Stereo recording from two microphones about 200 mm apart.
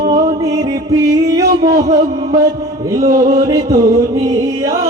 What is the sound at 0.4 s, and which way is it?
Music, 15° right (ahead or behind).